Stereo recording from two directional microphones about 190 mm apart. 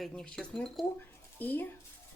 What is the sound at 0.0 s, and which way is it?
Speech, 5° left (ahead or behind).